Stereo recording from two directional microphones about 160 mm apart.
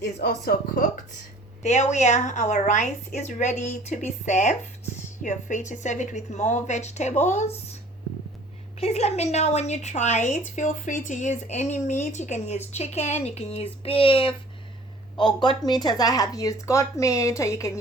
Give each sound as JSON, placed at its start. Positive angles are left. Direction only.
{"t": 0.0, "sound": "speech", "side_deg": 80}
{"t": 1.6, "sound": "a woman's voice", "side_deg": 45}
{"t": 8.8, "sound": "a woman's voice", "side_deg": 40}